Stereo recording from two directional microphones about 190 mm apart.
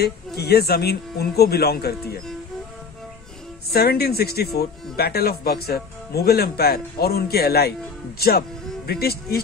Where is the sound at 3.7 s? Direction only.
55° left (ahead or behind).